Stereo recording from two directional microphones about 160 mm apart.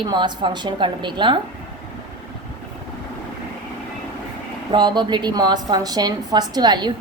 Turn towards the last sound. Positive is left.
turn(degrees=-25)  # may be behind; listen again after turning